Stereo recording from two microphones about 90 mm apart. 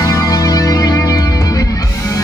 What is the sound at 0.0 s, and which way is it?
Music, 40° left (ahead or behind).